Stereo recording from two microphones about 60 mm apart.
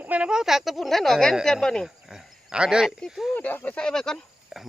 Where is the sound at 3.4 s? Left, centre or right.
Left.